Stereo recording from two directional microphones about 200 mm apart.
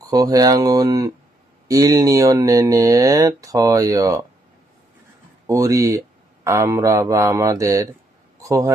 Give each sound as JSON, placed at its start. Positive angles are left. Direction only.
{"t": 0.0, "sound": "speech", "side_deg": -20}
{"t": 5.5, "sound": "a man's voice", "side_deg": -15}